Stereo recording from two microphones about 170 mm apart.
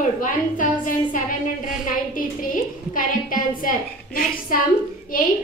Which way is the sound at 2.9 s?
55° left (ahead or behind).